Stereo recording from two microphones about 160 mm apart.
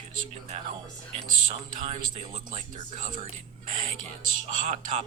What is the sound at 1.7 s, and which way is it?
A man's voice, 55° right (ahead or behind).